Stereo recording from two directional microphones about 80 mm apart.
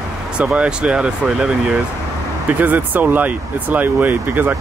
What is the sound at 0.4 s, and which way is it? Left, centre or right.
Speech, centre.